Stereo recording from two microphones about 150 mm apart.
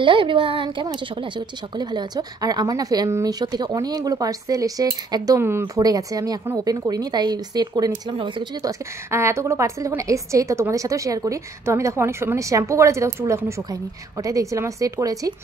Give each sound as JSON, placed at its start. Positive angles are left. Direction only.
{"t": 0.0, "sound": "a woman's voice", "side_deg": -35}
{"t": 8.6, "sound": "a woman's voice", "side_deg": -20}